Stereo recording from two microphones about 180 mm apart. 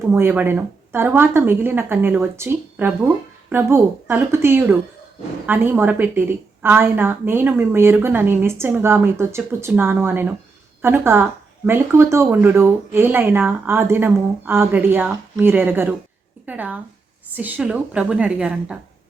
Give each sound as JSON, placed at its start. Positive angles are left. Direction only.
{"t": 0.0, "sound": "a woman's voice", "side_deg": -10}